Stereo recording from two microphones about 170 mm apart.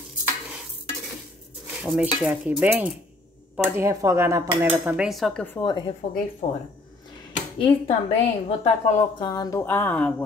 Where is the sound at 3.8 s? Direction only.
15° right (ahead or behind); by 5.6 s 5° left (ahead or behind).